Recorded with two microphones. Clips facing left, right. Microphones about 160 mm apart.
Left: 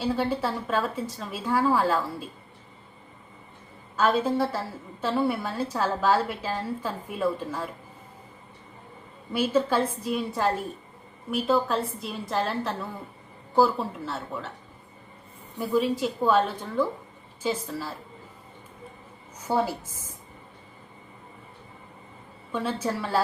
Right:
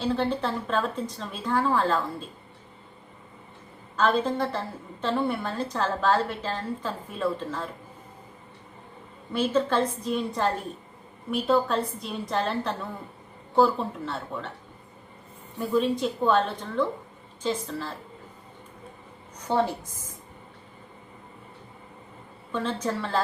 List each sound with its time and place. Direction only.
0.0 s a woman's voice: 5° left (ahead or behind)
3.9 s a woman's voice: 5° left (ahead or behind)
9.3 s a woman's voice: 10° left (ahead or behind)
15.5 s a woman's voice: 5° left (ahead or behind)
19.4 s a woman's voice: 10° left (ahead or behind)
22.5 s a woman's voice: 10° left (ahead or behind)